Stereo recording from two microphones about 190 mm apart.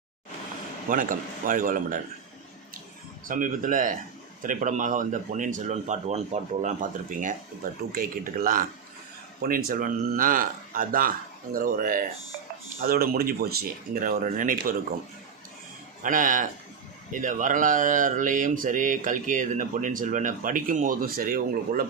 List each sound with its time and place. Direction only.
0.9 s speech: 45° right (ahead or behind)
3.2 s speech: 45° right (ahead or behind)
16.0 s speech: 45° right (ahead or behind)